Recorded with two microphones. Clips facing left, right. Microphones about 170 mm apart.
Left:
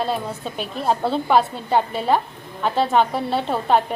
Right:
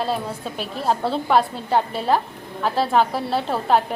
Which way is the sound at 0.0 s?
Centre (ahead or behind).